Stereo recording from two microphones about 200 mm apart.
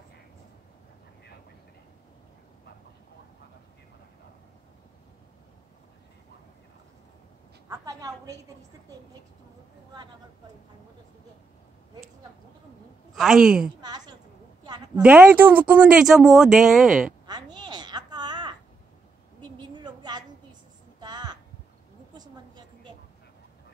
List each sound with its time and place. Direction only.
7.7 s a woman's voice: 15° right (ahead or behind)
13.1 s speech: centre (ahead or behind)
13.7 s a woman's voice: 20° right (ahead or behind)
15.0 s speech: 5° right (ahead or behind)
17.3 s babbling: 20° right (ahead or behind)
19.7 s a sound: 20° right (ahead or behind)
21.0 s hum: 20° right (ahead or behind)